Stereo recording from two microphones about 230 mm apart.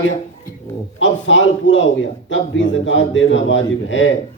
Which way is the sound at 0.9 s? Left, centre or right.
Left.